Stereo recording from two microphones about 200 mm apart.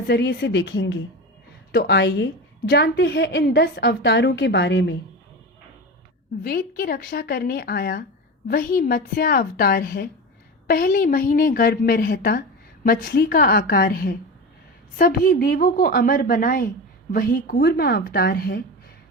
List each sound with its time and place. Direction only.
0.1 s a woman's voice: 60° left (ahead or behind)
6.4 s a woman's voice: 45° left (ahead or behind)